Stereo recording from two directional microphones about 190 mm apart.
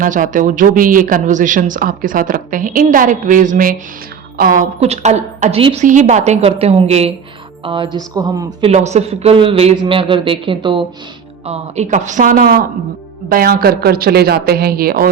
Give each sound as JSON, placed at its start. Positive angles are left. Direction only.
{"t": 0.0, "sound": "a woman's voice", "side_deg": -45}
{"t": 8.6, "sound": "a woman's voice", "side_deg": -35}